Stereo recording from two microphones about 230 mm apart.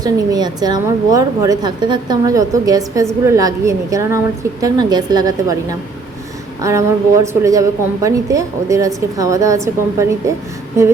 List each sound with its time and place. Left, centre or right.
0.0 s a woman's voice: centre